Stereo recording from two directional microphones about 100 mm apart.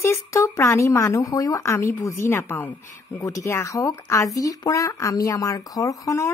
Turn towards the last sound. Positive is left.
turn(degrees=35)  # may be behind; listen again after turning